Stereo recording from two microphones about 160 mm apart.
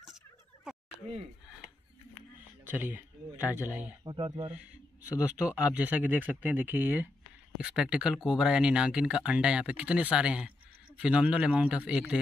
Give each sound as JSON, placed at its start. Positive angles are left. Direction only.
{"t": 0.7, "sound": "fowl", "side_deg": -5}
{"t": 2.6, "sound": "speech", "side_deg": -10}
{"t": 4.0, "sound": "speech", "side_deg": -30}
{"t": 5.5, "sound": "speech", "side_deg": -10}